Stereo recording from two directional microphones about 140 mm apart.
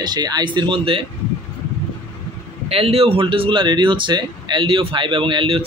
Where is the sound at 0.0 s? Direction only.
30° right (ahead or behind).